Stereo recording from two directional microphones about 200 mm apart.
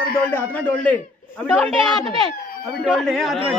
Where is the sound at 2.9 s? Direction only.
Centre (ahead or behind).